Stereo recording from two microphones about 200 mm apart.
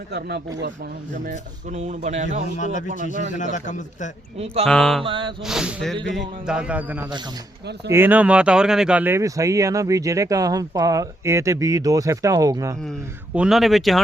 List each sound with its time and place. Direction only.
0.1 s speech: 55° right (ahead or behind)
1.7 s a man's voice: 35° right (ahead or behind)
2.6 s a man's voice: 40° left (ahead or behind)
4.6 s speech: 5° left (ahead or behind)
5.0 s a sound: 25° right (ahead or behind)
5.5 s speech: 5° right (ahead or behind)
13.3 s speech: 5° right (ahead or behind)